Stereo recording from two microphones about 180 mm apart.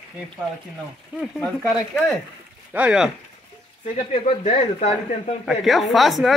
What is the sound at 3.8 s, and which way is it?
Speech, 40° left (ahead or behind).